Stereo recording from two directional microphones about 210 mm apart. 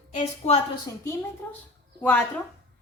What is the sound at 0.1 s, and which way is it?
Speech, 30° left (ahead or behind).